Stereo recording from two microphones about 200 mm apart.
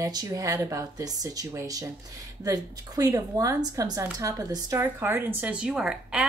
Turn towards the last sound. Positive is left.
turn(degrees=-5)  # may be behind; listen again after turning